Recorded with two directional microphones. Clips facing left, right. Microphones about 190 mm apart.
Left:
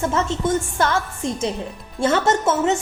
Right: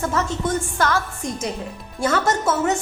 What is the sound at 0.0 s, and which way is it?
A woman's voice, 25° left (ahead or behind).